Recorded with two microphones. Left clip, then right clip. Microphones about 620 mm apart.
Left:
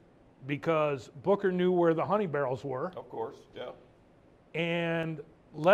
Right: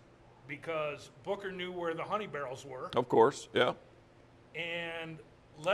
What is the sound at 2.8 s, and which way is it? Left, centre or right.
Speech, right.